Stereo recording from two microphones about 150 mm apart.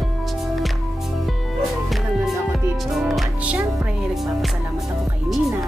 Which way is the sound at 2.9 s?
Centre (ahead or behind).